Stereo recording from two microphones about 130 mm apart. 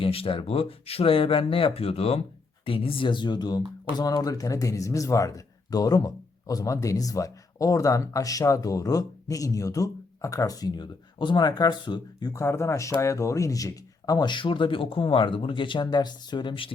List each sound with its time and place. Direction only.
0.0 s speech: 45° left (ahead or behind)
12.3 s speech: 20° left (ahead or behind); by 16.7 s 40° left (ahead or behind)